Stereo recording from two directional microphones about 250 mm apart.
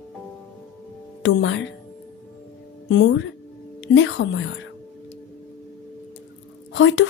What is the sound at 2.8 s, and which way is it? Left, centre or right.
A woman's voice, left.